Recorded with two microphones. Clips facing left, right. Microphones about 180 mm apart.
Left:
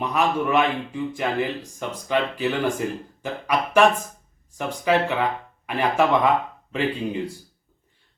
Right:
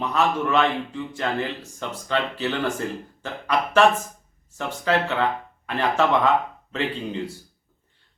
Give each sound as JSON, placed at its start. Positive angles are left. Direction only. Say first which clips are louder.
{"t": 0.0, "sound": "a man's voice", "louder": "even", "side_deg": 15}